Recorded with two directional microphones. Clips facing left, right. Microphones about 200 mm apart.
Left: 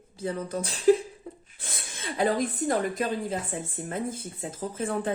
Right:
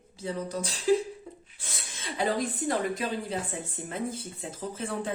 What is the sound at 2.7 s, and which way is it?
Speech, 45° left (ahead or behind).